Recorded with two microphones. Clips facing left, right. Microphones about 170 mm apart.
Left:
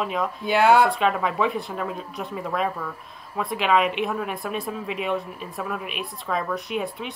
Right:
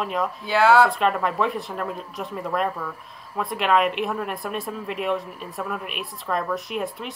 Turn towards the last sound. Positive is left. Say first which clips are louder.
# even
turn(degrees=0)  # may be behind; listen again after turning